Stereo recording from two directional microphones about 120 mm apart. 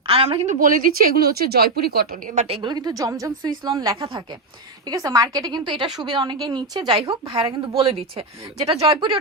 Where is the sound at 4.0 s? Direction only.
40° right (ahead or behind).